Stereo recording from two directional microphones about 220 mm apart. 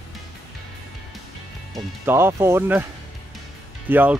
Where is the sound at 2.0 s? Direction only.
10° right (ahead or behind).